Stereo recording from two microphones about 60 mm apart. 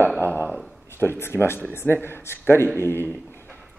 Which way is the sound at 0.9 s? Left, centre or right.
Left.